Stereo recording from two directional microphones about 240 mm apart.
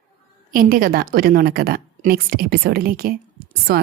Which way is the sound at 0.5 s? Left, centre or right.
Right.